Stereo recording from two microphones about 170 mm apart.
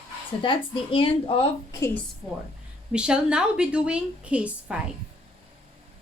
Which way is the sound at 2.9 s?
5° right (ahead or behind).